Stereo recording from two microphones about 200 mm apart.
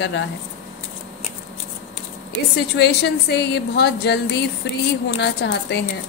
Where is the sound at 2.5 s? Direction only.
55° left (ahead or behind).